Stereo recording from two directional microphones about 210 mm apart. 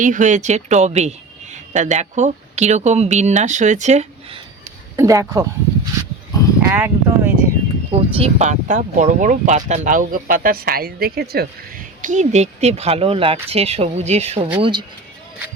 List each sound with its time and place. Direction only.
0.0 s speech: 35° right (ahead or behind)
4.9 s speech: 15° right (ahead or behind)
7.9 s speech: 30° right (ahead or behind)